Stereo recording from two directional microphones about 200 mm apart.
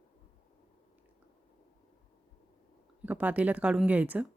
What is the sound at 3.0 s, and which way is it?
Speech, 5° right (ahead or behind).